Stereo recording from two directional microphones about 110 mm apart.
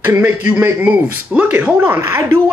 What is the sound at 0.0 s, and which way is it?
Speech, 20° right (ahead or behind).